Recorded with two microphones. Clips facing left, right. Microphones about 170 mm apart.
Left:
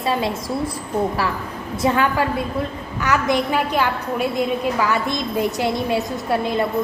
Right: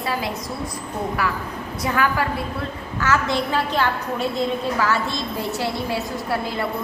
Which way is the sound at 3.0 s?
15° left (ahead or behind).